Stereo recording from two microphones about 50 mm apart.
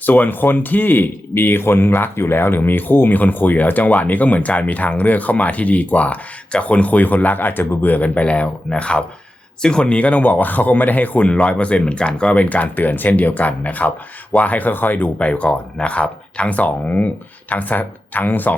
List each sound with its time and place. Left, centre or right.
0.0 s speech: left